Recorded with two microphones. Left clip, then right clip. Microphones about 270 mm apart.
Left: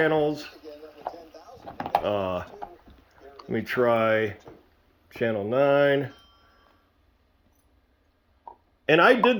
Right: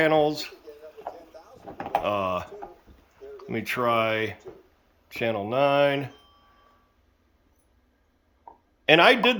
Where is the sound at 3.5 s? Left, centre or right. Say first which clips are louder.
Left 2 dB; centre.